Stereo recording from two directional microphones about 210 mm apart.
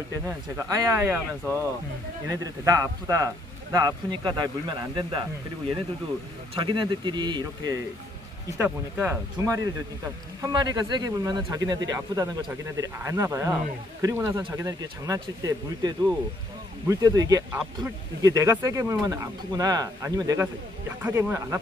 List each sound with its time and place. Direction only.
0.6 s a man's voice: 15° right (ahead or behind)
6.5 s a man's voice: 25° right (ahead or behind)